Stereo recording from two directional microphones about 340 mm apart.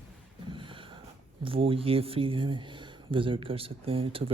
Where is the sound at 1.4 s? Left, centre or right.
Centre.